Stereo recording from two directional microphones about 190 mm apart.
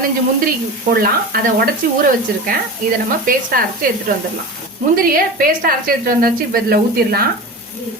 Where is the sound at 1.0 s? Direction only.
50° right (ahead or behind).